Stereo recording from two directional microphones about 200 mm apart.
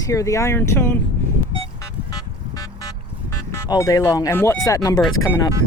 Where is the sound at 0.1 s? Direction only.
15° left (ahead or behind).